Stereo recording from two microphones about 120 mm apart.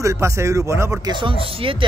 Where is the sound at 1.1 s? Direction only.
45° right (ahead or behind).